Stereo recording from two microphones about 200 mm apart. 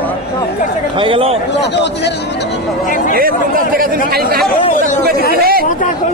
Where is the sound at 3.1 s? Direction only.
45° right (ahead or behind).